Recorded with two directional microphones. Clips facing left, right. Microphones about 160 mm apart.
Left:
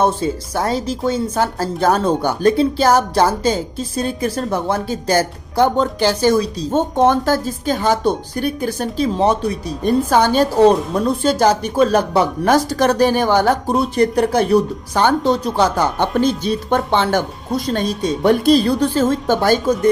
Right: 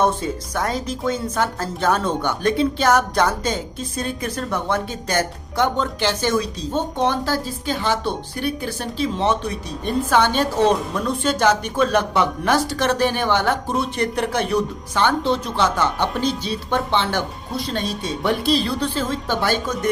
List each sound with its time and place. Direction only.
0.0 s speech: 30° left (ahead or behind)
6.7 s speech: 50° left (ahead or behind)